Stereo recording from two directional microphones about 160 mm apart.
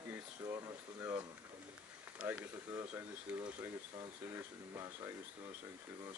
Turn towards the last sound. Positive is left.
turn(degrees=-15)  # may be behind; listen again after turning